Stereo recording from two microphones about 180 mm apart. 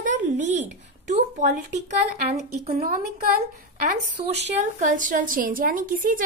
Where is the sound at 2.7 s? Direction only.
55° right (ahead or behind).